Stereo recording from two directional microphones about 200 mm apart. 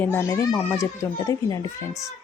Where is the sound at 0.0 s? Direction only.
10° left (ahead or behind).